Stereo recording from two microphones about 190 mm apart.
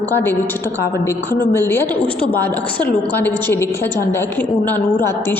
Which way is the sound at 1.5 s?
10° left (ahead or behind).